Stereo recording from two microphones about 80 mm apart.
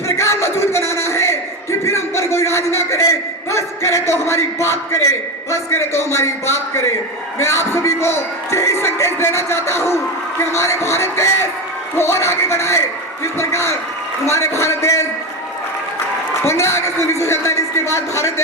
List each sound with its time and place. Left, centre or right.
0.2 s a sound: left
1.8 s music: left
3.5 s a man's voice: left
16.4 s a man's voice: left